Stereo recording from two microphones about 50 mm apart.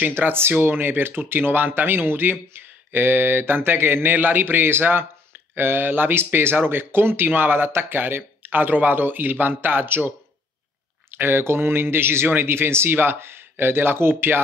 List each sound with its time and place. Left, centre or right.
0.2 s speech: right
11.1 s speech: right